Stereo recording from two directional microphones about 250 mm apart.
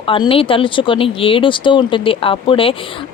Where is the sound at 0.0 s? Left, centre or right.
Left.